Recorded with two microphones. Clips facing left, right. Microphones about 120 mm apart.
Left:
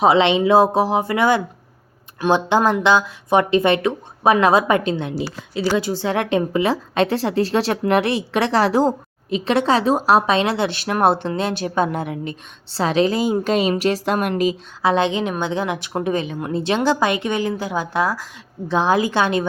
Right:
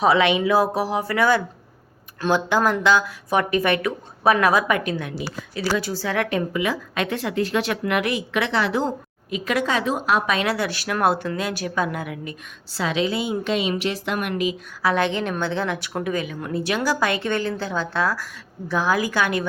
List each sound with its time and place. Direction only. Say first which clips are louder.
0.0 s a woman's voice: left 3 dB; 25° left (ahead or behind)
14.8 s a woman's voice: left 3 dB; 20° left (ahead or behind)